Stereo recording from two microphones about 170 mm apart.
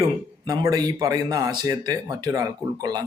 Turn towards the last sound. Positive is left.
turn(degrees=-20)  # may be behind; listen again after turning